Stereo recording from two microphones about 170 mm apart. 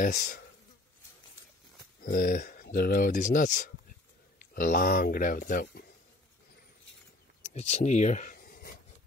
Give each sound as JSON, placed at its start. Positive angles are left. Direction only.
{"t": 0.0, "sound": "speech", "side_deg": 55}
{"t": 2.0, "sound": "speech", "side_deg": 60}
{"t": 7.5, "sound": "speech", "side_deg": 40}